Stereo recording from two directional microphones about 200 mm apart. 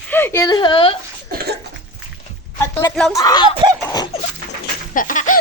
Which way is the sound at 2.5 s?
10° left (ahead or behind).